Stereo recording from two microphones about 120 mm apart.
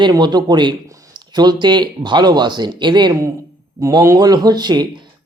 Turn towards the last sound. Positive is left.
turn(degrees=-35)  # may be behind; listen again after turning